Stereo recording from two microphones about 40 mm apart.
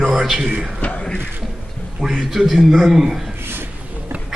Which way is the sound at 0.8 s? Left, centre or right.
Left.